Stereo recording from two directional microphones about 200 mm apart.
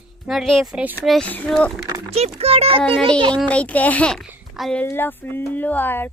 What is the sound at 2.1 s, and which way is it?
Speech, 30° right (ahead or behind).